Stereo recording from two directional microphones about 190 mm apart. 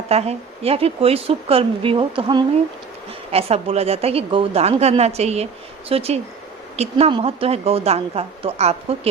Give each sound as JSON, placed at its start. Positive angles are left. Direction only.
{"t": 0.1, "sound": "a woman's voice", "side_deg": -35}